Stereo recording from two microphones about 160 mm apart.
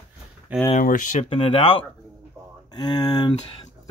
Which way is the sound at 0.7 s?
55° left (ahead or behind).